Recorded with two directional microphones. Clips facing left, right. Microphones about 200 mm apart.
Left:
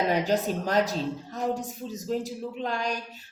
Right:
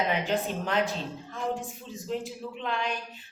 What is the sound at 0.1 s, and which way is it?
Speech, 40° left (ahead or behind).